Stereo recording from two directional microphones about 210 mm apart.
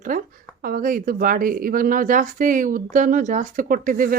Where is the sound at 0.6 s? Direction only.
40° right (ahead or behind).